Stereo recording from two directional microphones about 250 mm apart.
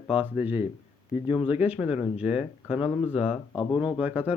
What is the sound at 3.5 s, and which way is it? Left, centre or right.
Speech, centre.